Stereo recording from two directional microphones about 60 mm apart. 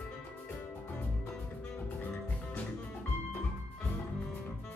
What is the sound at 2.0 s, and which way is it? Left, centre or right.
Music, left.